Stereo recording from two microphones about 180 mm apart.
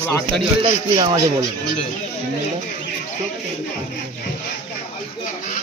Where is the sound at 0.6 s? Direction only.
25° right (ahead or behind).